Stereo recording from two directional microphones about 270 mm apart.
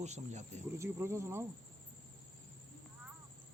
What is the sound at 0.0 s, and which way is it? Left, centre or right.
Speech, right.